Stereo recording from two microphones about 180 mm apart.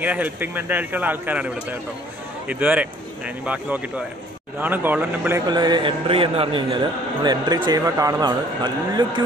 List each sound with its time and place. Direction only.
0.0 s speech: 10° right (ahead or behind)
5.5 s speech: 25° right (ahead or behind)